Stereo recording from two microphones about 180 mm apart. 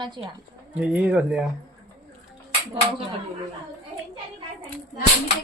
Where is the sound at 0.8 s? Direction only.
5° right (ahead or behind).